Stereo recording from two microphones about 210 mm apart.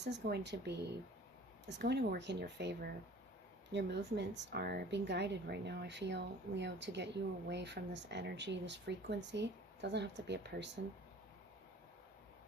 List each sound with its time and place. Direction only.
0.0 s speech: 55° right (ahead or behind)